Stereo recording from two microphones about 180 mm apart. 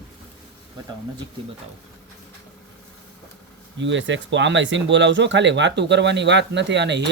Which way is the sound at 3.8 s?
90° right.